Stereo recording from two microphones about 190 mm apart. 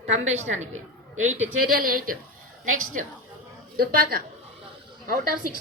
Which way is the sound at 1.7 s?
50° right (ahead or behind).